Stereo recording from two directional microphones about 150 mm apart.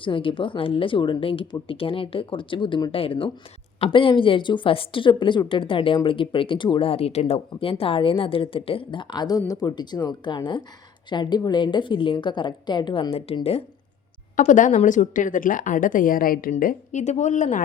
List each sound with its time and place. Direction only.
0.0 s a woman's voice: 35° left (ahead or behind)
14.3 s a woman's voice: 60° left (ahead or behind)